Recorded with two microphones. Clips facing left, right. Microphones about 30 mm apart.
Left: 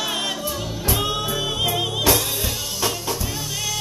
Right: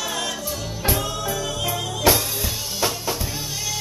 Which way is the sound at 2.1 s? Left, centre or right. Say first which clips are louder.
Right 2 dB; centre.